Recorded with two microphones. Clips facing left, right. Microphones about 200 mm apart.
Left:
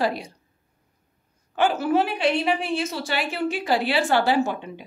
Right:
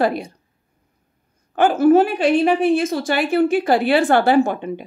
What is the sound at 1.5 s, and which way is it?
A woman's voice, 50° right (ahead or behind).